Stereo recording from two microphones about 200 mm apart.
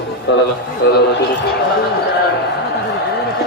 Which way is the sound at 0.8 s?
55° left (ahead or behind).